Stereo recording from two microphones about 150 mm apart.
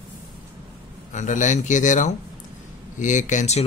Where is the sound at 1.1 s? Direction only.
55° left (ahead or behind).